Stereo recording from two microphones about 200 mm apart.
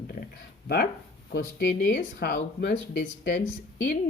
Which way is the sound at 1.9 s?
50° left (ahead or behind).